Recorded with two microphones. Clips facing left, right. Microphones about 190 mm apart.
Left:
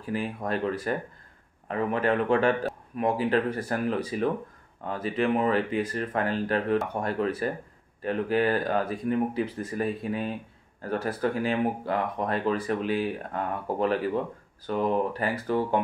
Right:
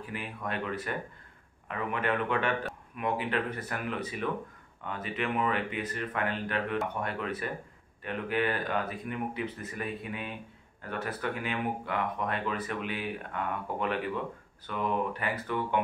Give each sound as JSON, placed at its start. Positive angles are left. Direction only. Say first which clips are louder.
{"t": 0.0, "sound": "speech", "louder": "left 7 dB", "side_deg": 35}